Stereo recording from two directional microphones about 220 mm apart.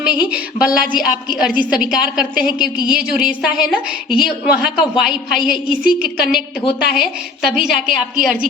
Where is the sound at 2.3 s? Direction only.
40° right (ahead or behind).